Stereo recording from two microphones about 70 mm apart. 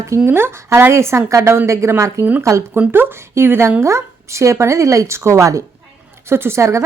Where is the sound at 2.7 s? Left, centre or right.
Right.